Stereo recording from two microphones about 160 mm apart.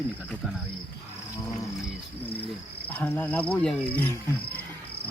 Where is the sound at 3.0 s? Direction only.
10° left (ahead or behind).